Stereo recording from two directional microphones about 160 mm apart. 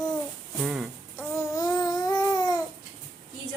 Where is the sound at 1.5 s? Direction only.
25° left (ahead or behind).